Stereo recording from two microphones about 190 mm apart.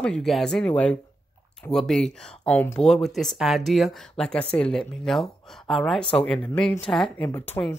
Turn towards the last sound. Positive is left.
turn(degrees=15)  # may be behind; listen again after turning